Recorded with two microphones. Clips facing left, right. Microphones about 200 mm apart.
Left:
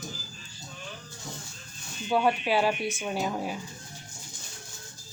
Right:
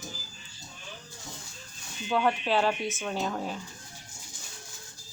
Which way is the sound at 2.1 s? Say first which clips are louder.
Left 2 dB; 10° left (ahead or behind).